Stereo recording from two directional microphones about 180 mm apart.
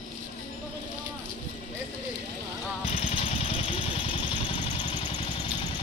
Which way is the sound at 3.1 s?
30° left (ahead or behind).